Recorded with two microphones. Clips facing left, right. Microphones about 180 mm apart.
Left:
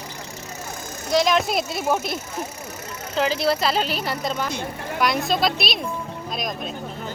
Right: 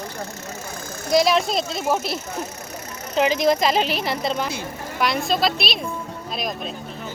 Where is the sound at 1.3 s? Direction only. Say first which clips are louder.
Even; 5° left (ahead or behind).